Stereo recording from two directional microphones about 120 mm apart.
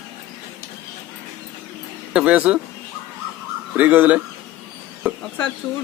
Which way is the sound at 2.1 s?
10° right (ahead or behind).